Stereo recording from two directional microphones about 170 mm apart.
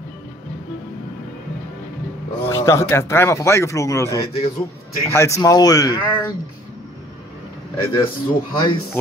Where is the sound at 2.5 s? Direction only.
15° left (ahead or behind).